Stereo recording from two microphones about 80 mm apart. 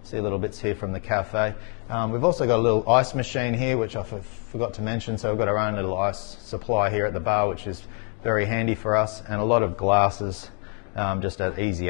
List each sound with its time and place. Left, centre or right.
0.1 s a man's voice: centre